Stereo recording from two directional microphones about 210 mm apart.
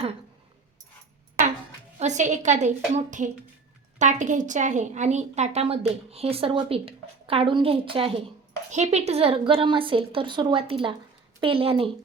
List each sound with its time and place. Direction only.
2.0 s a woman's voice: 35° right (ahead or behind)